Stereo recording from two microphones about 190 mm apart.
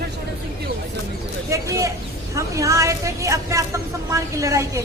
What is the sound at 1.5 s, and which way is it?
Speech, 15° right (ahead or behind).